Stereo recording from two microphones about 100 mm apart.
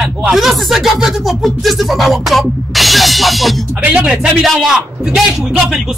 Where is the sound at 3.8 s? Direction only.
10° right (ahead or behind).